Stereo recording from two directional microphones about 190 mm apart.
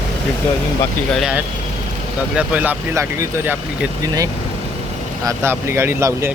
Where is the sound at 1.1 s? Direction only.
Centre (ahead or behind).